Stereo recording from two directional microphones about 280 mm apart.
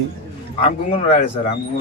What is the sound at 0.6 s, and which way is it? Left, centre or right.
Speech, left.